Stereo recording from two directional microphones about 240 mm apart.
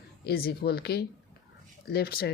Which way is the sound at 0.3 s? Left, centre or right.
Left.